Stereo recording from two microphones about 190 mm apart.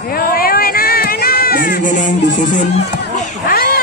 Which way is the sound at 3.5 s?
50° left (ahead or behind).